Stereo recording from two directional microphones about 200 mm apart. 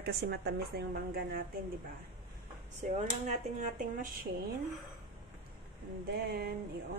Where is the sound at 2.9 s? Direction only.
30° right (ahead or behind).